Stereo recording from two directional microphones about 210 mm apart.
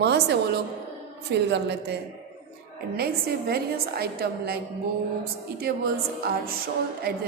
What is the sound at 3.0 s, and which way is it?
A woman's voice, 45° right (ahead or behind).